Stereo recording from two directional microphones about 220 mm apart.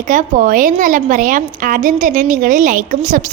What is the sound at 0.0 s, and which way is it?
A woman's voice, 35° right (ahead or behind).